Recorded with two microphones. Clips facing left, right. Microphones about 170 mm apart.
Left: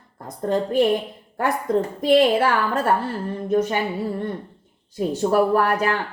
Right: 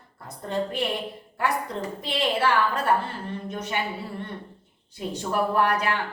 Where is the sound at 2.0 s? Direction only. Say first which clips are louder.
Left 9 dB; 50° left (ahead or behind).